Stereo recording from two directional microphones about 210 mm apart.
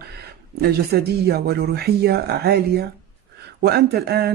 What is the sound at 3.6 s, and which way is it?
Speech, 50° right (ahead or behind).